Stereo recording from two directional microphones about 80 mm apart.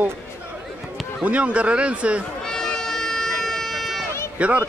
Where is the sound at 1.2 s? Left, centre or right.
Centre.